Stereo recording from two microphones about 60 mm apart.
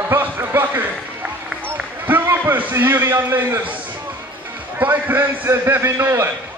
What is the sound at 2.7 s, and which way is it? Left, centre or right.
A man's voice, right.